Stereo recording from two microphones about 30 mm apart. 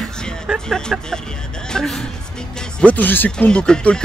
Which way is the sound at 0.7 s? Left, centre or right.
Left.